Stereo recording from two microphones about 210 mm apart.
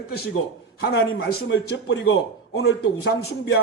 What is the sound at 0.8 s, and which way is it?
A man's voice, 45° left (ahead or behind).